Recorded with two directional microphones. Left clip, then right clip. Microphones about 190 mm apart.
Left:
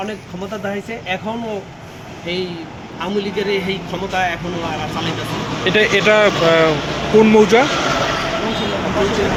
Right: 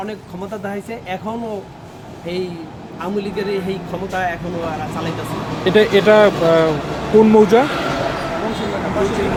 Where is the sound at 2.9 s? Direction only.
10° right (ahead or behind).